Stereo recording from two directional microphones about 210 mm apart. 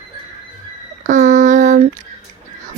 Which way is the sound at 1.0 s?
35° right (ahead or behind).